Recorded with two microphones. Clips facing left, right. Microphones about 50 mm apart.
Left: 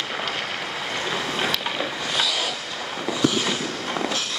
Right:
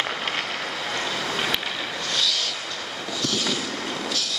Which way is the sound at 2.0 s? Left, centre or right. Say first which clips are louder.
Left 1 dB; centre.